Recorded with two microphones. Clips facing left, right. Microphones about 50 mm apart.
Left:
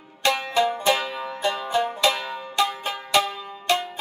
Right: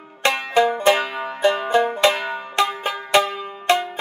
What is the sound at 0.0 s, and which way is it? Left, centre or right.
Banjo, right.